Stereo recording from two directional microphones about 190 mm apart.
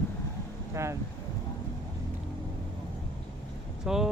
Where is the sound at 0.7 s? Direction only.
15° right (ahead or behind).